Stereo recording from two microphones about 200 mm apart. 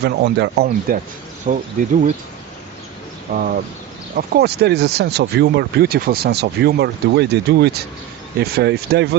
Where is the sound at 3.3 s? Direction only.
45° right (ahead or behind).